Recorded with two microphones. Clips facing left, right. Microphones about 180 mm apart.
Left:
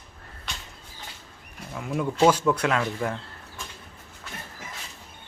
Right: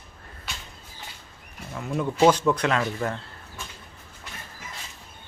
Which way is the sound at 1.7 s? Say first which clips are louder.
Even; 5° left (ahead or behind).